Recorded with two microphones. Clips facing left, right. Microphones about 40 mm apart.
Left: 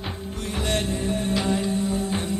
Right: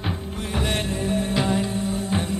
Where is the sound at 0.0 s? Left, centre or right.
Centre.